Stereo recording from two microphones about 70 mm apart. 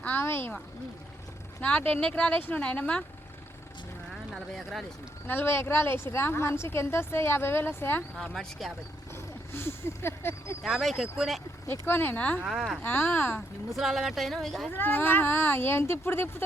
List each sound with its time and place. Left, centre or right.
0.2 s a woman's voice: left
1.6 s speech: centre
4.5 s speech: centre
5.2 s a woman's voice: left
8.1 s speech: centre
9.5 s a woman's voice: left
10.6 s speech: centre
11.7 s a woman's voice: left
12.1 s speech: left
12.5 s speech: centre
12.8 s a woman's voice: left
13.7 s speech: centre
14.7 s a woman's voice: left